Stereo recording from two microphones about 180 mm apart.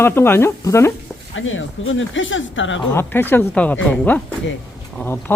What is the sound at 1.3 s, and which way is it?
Speech, 90° left.